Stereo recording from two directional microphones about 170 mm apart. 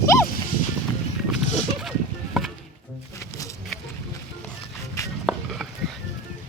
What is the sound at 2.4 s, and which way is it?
Music, centre (ahead or behind).